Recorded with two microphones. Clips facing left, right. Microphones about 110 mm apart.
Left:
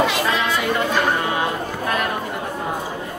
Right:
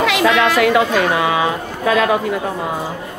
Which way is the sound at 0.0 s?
90° right.